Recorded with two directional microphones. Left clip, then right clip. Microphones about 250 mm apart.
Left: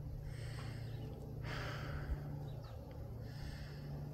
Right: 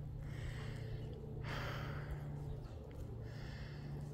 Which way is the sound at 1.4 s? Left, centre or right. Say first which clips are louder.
Even; centre.